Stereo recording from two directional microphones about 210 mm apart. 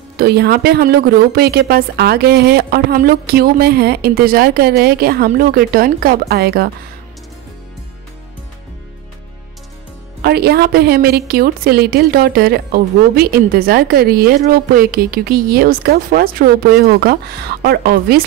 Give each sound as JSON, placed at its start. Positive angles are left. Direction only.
{"t": 0.2, "sound": "speech", "side_deg": -50}
{"t": 10.2, "sound": "speech", "side_deg": -50}